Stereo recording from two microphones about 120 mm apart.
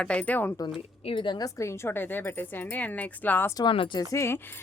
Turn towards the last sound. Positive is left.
turn(degrees=20)  # may be behind; listen again after turning